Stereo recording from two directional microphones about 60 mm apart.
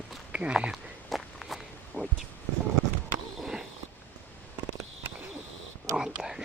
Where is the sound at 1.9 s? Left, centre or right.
Left.